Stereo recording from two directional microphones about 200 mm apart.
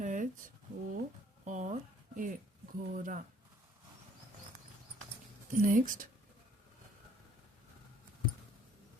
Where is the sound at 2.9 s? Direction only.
40° right (ahead or behind).